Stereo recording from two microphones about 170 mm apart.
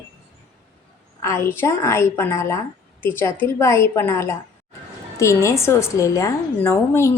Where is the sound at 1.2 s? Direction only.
15° left (ahead or behind).